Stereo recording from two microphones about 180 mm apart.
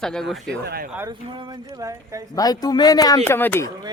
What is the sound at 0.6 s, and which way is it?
Speech, 60° right (ahead or behind).